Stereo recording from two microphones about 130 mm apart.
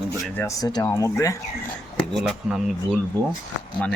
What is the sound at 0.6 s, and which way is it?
Speech, 30° left (ahead or behind).